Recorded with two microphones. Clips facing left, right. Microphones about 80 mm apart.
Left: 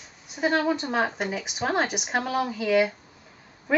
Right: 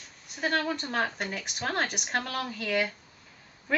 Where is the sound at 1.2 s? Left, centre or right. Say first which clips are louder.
Left 6 dB; centre.